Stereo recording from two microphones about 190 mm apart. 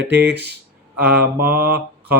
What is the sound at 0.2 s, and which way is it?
Speech, 10° right (ahead or behind).